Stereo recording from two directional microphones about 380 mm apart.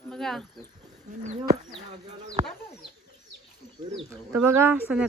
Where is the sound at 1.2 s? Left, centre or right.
Centre.